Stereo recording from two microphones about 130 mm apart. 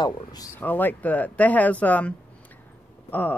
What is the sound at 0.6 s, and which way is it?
Speech, 15° left (ahead or behind).